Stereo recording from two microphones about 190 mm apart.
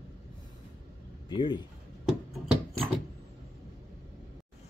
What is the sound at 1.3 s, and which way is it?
Speech, 25° left (ahead or behind).